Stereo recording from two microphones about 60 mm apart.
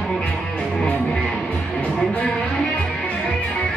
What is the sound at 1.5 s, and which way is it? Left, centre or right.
Music, left.